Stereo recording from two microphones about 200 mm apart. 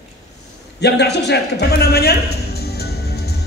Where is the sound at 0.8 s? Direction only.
55° left (ahead or behind).